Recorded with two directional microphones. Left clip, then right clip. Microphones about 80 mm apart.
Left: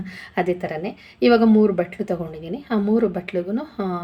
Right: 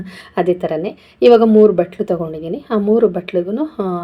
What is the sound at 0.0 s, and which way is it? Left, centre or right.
A woman's voice, right.